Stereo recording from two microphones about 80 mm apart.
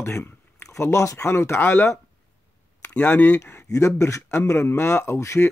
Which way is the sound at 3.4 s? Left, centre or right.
Left.